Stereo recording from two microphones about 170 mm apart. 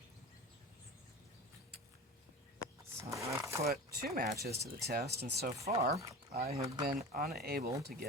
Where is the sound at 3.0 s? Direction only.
20° right (ahead or behind).